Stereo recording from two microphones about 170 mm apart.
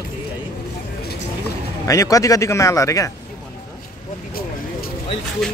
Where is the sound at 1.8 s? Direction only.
20° left (ahead or behind).